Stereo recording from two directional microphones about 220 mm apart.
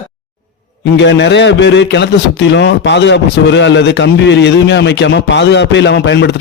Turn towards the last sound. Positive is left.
turn(degrees=50)  # may be behind; listen again after turning